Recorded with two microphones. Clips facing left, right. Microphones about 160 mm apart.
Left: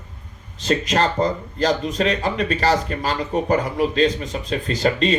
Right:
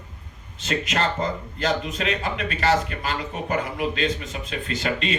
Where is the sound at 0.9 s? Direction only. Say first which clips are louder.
Left 4 dB; 35° left (ahead or behind).